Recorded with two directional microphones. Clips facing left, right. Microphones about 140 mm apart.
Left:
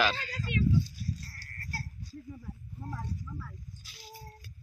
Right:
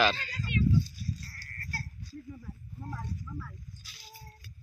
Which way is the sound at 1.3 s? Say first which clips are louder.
Even; 20° left (ahead or behind).